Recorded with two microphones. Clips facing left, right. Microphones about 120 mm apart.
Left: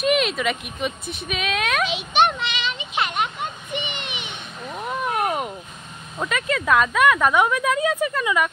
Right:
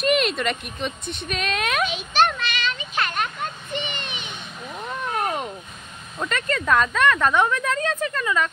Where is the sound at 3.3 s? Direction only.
15° left (ahead or behind).